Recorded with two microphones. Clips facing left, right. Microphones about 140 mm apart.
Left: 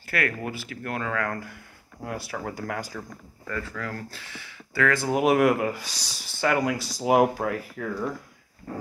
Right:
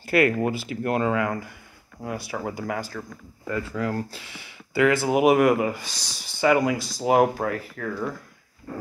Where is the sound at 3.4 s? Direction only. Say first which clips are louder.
Right 6 dB; 20° right (ahead or behind); by 7.9 s 5° left (ahead or behind).